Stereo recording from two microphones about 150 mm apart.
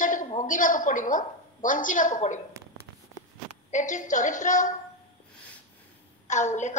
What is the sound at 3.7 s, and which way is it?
A woman's voice, 55° left (ahead or behind).